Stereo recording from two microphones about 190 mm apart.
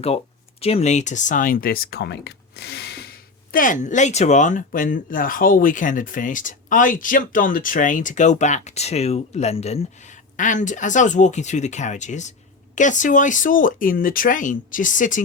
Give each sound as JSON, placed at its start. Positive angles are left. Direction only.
{"t": 0.6, "sound": "speech", "side_deg": 35}
{"t": 3.5, "sound": "speech", "side_deg": 45}